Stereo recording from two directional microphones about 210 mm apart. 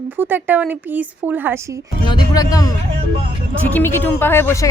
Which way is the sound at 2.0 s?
15° left (ahead or behind).